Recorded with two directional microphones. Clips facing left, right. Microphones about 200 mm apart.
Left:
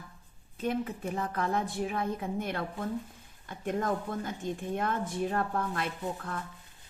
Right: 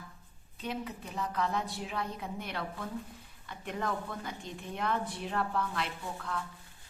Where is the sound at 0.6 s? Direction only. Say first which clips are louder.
Left 6 dB; 50° left (ahead or behind).